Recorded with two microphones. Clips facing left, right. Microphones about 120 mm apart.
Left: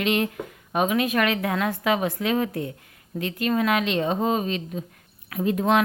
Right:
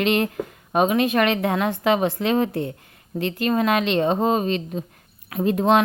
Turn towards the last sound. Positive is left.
turn(degrees=-30)  # may be behind; listen again after turning